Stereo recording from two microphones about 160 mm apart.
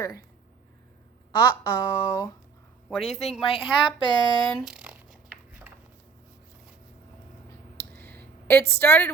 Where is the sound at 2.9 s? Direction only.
Centre (ahead or behind).